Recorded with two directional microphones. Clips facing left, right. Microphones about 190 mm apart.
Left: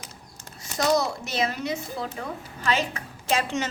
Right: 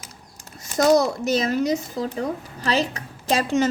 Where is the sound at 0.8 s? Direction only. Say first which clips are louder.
Right 6 dB; 45° right (ahead or behind).